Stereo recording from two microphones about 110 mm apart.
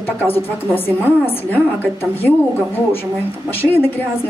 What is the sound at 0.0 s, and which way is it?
A woman's voice, 20° left (ahead or behind).